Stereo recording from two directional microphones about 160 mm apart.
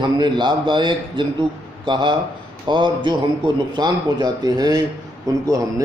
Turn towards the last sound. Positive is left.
turn(degrees=-20)  # may be behind; listen again after turning